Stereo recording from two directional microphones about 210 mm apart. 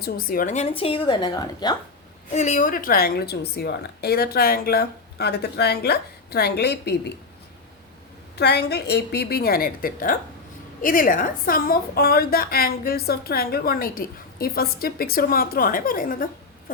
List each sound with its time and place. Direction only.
0.0 s a woman's voice: 45° left (ahead or behind); by 1.8 s 20° left (ahead or behind)
2.3 s a woman's voice: 35° left (ahead or behind); by 7.1 s 50° left (ahead or behind)
8.4 s a woman's voice: 50° left (ahead or behind)